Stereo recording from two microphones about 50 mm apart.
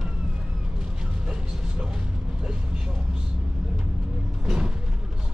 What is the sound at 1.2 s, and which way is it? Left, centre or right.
Vehicle, centre.